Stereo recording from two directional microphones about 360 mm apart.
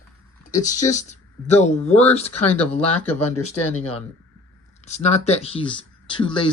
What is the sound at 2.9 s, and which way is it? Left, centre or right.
Speech, left.